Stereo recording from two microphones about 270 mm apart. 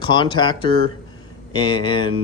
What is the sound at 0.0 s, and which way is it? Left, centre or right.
A man's voice, centre.